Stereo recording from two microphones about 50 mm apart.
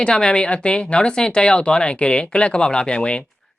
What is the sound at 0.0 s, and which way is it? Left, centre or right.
Speech, centre.